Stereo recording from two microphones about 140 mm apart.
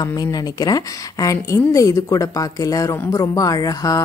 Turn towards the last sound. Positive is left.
turn(degrees=25)  # may be behind; listen again after turning